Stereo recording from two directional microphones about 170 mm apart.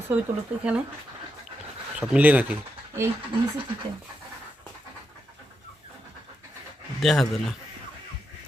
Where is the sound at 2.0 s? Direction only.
10° right (ahead or behind).